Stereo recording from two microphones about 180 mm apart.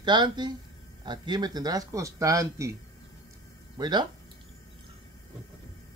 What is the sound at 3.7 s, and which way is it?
Speech, 25° right (ahead or behind).